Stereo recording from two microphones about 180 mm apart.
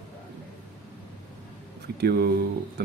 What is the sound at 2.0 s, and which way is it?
Speech, 60° right (ahead or behind).